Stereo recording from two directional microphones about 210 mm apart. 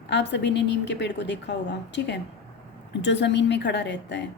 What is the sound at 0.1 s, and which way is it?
Speech, 55° left (ahead or behind).